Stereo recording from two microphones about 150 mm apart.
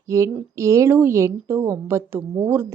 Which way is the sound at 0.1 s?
20° right (ahead or behind).